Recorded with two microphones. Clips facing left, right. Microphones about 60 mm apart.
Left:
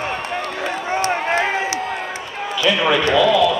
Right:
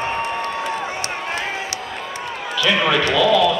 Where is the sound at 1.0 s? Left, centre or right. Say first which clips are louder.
Left 7 dB; left.